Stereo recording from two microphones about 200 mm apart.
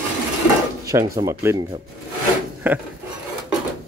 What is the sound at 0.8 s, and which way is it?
Speech, 15° right (ahead or behind).